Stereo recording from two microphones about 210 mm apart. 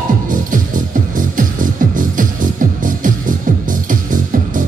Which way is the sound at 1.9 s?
40° right (ahead or behind).